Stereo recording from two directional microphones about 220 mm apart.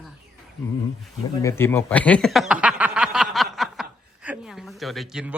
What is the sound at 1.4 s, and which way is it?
Speech, 10° left (ahead or behind).